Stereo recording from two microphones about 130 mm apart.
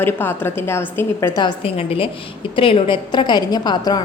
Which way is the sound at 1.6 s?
45° left (ahead or behind).